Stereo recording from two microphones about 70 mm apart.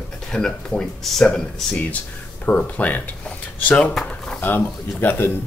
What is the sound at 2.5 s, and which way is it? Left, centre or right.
Speech, left.